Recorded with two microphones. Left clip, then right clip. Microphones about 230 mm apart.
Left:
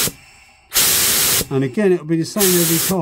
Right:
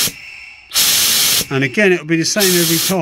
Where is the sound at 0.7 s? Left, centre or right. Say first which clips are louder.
Right 3 dB; left.